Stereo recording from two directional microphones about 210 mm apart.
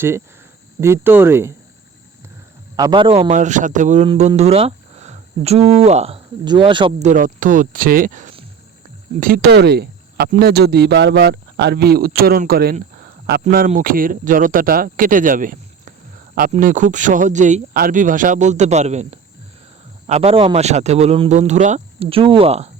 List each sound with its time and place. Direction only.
0.8 s speech: 10° right (ahead or behind)
2.7 s speech: 20° right (ahead or behind)
7.1 s speech: 40° right (ahead or behind)